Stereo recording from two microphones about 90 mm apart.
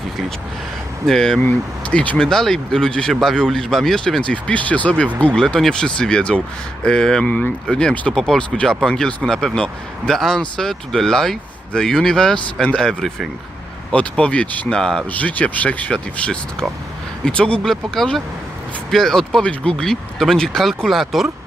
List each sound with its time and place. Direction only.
1.0 s speech: 5° left (ahead or behind)